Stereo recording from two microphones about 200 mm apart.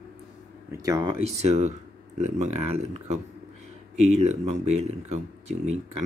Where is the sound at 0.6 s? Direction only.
15° right (ahead or behind).